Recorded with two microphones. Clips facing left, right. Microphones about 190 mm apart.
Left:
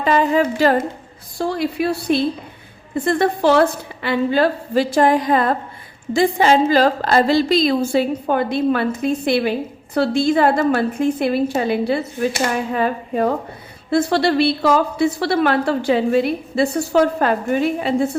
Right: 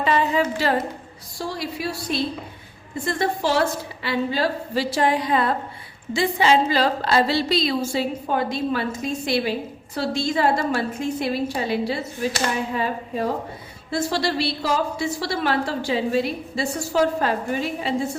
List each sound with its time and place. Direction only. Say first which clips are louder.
0.0 s a woman's voice: left 4 dB; 50° left (ahead or behind)